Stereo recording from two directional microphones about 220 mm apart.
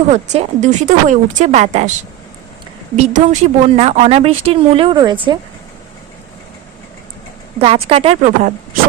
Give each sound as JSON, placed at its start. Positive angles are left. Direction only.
{"t": 0.1, "sound": "a woman's voice", "side_deg": -30}
{"t": 7.6, "sound": "speech", "side_deg": -25}